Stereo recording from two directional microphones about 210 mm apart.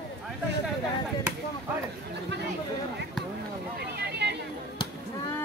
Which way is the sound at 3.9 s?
50° right (ahead or behind).